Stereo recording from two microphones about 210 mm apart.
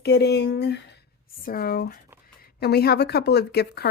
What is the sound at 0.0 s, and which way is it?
Speech, 50° left (ahead or behind).